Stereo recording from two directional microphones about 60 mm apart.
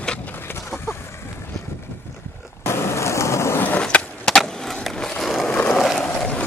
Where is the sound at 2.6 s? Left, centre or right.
Left.